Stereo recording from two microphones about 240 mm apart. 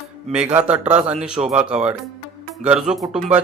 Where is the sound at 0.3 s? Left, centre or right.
Centre.